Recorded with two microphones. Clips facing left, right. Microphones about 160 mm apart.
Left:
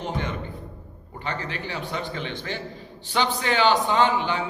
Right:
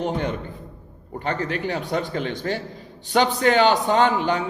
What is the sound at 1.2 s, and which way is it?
A man's voice, 45° right (ahead or behind).